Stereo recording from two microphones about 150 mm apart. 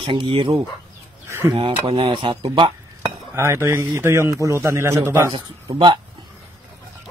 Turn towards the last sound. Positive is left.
turn(degrees=-30)  # may be behind; listen again after turning